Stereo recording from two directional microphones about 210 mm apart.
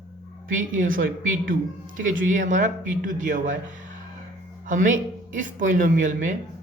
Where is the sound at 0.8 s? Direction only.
40° right (ahead or behind).